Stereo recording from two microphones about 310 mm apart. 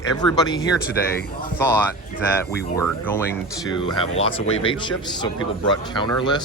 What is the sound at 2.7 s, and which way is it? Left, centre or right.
A man's voice, centre.